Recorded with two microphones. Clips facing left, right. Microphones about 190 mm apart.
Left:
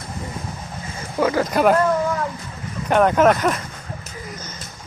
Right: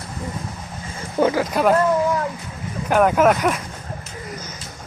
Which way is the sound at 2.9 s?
5° right (ahead or behind).